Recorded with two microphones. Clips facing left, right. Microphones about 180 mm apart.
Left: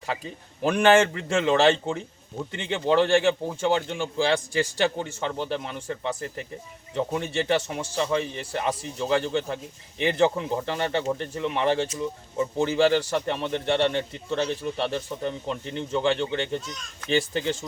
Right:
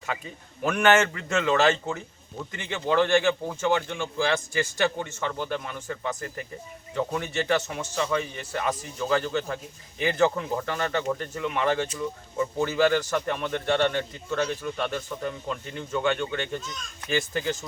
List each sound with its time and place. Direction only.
0.1 s speech: 30° left (ahead or behind)